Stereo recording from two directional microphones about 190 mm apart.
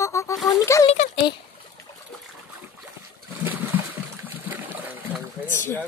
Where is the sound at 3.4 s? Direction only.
10° right (ahead or behind).